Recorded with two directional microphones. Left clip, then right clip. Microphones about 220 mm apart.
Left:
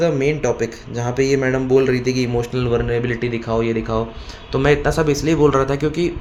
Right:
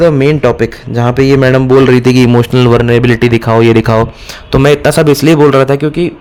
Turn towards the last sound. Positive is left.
turn(degrees=-30)  # may be behind; listen again after turning